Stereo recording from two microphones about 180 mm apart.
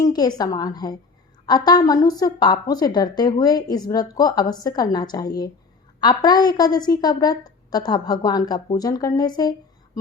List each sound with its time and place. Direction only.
0.0 s a woman's voice: 20° left (ahead or behind)